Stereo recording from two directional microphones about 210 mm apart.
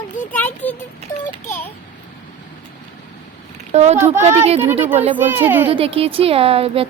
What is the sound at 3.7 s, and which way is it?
Speech, 30° right (ahead or behind).